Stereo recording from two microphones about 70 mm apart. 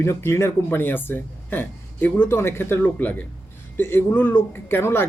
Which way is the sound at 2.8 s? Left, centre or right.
Left.